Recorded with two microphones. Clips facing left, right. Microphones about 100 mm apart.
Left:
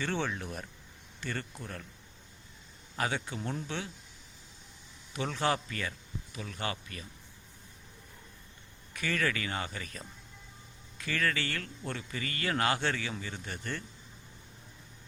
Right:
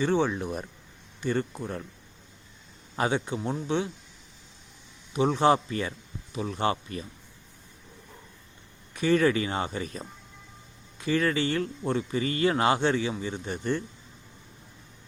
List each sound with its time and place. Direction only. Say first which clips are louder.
0.0 s speech: right 9 dB; 15° right (ahead or behind)
2.9 s speech: right 7 dB; 25° right (ahead or behind)
5.1 s speech: right 9 dB; 25° right (ahead or behind)
8.9 s speech: right 10 dB; 25° right (ahead or behind)